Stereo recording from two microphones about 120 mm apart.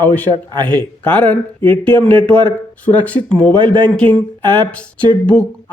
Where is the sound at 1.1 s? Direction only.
10° left (ahead or behind).